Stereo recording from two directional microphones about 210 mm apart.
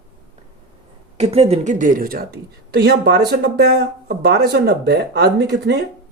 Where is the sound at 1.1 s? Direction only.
30° right (ahead or behind); by 5.7 s 55° right (ahead or behind).